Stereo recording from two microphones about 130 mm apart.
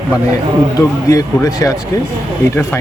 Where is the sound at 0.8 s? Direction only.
25° left (ahead or behind).